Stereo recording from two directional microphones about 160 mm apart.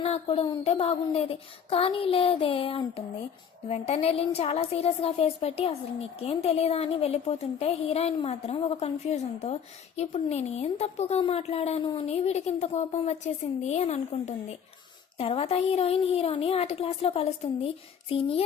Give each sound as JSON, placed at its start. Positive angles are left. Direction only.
{"t": 0.0, "sound": "a woman's voice", "side_deg": 40}